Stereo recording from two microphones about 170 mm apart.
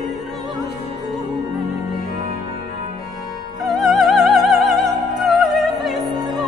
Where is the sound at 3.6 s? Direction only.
Centre (ahead or behind).